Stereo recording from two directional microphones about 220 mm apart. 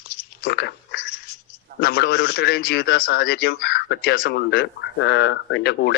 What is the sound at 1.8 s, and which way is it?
A man's voice, 50° left (ahead or behind).